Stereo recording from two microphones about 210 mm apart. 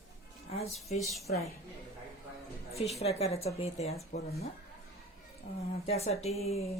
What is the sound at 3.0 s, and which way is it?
Speech, 30° left (ahead or behind).